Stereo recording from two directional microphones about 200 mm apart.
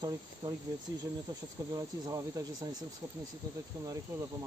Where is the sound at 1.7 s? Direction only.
20° right (ahead or behind).